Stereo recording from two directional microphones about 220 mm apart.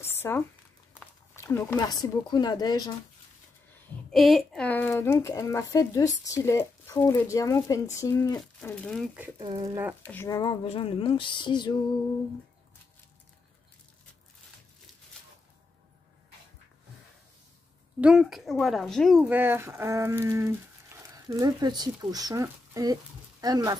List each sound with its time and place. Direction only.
0.1 s a sound: 10° left (ahead or behind)
1.3 s speech: 10° left (ahead or behind)
4.1 s speech: centre (ahead or behind)
8.4 s speech: 5° left (ahead or behind)
9.4 s speech: 25° right (ahead or behind)
10.0 s speech: 10° left (ahead or behind)
18.0 s speech: centre (ahead or behind); by 23.8 s 15° right (ahead or behind)